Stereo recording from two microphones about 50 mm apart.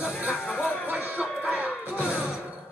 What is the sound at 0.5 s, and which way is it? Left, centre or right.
Music, left.